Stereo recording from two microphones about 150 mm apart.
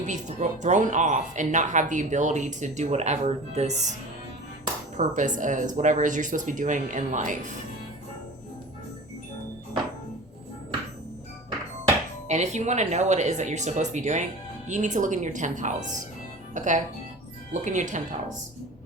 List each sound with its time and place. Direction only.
0.1 s speech: 50° right (ahead or behind)
4.9 s speech: 55° right (ahead or behind)
12.3 s speech: 50° right (ahead or behind)